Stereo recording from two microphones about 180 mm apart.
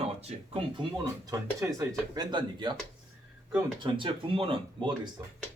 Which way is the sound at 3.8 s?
25° right (ahead or behind).